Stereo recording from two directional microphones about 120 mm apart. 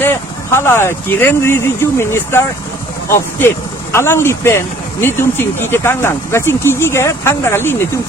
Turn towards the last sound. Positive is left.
turn(degrees=20)  # may be behind; listen again after turning